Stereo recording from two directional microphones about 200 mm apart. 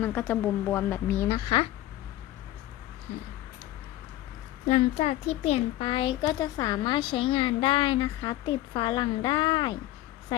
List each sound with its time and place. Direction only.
0.0 s speech: 10° left (ahead or behind)
4.7 s speech: 30° left (ahead or behind)